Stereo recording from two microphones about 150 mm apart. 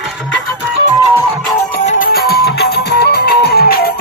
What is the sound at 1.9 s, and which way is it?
Music, 70° left (ahead or behind).